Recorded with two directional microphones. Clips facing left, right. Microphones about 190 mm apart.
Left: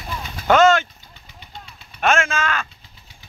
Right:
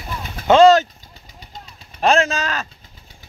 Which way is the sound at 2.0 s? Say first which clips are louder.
Right 3 dB; 35° right (ahead or behind).